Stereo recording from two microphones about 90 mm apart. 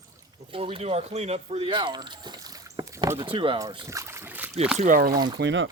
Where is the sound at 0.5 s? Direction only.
90° right.